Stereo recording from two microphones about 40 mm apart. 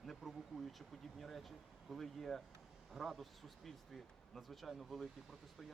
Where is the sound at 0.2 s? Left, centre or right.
Centre.